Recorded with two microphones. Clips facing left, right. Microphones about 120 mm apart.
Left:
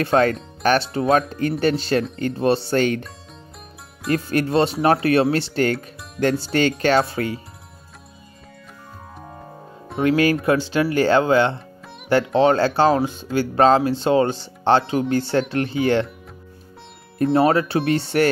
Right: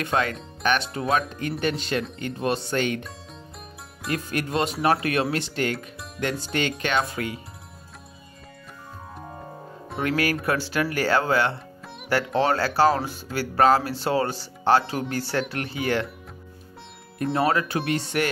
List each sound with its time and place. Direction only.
0.0 s speech: 35° left (ahead or behind)
4.3 s speech: 30° left (ahead or behind)
10.0 s speech: 25° left (ahead or behind)
17.2 s speech: 30° left (ahead or behind)